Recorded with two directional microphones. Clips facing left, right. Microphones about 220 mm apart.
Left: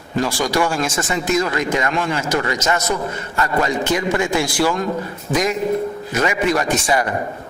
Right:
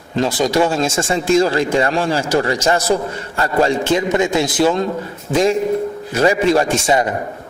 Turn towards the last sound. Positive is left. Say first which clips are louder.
# right 3 dB
turn(degrees=-25)  # may be behind; listen again after turning